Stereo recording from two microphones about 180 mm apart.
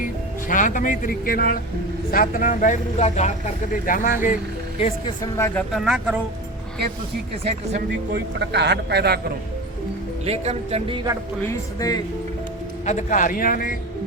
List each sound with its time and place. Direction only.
0.0 s speech: 50° left (ahead or behind)
5.2 s speech: 15° left (ahead or behind)
5.7 s speech: 5° right (ahead or behind)
8.1 s a man's voice: 70° right (ahead or behind)
10.2 s speech: 35° right (ahead or behind)
11.8 s speech: 20° left (ahead or behind)
12.8 s speech: 40° left (ahead or behind)